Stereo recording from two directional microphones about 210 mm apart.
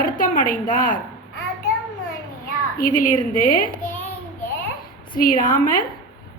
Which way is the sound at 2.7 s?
40° left (ahead or behind).